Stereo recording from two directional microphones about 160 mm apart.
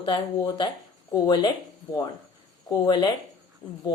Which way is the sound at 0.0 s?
25° left (ahead or behind).